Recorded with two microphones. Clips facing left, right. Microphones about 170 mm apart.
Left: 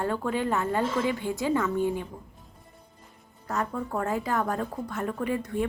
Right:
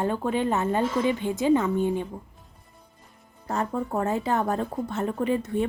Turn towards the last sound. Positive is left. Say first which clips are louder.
# right 4 dB
turn(degrees=-25)  # may be behind; listen again after turning